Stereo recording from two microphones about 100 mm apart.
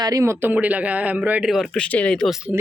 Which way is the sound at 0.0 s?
35° right (ahead or behind).